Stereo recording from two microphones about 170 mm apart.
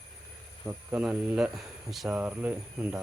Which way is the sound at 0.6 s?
10° right (ahead or behind).